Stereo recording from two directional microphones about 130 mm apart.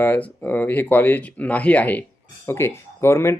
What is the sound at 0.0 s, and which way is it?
Speech, 15° left (ahead or behind).